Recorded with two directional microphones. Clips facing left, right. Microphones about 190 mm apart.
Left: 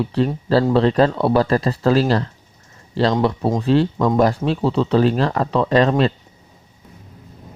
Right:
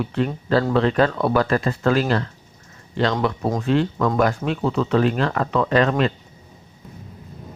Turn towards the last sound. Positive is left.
turn(degrees=35)  # may be behind; listen again after turning